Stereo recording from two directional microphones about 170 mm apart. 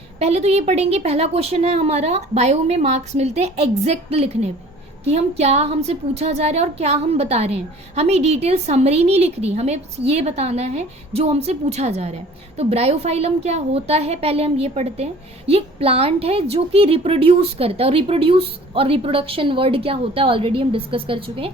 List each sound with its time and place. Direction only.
0.2 s a woman's voice: 40° right (ahead or behind)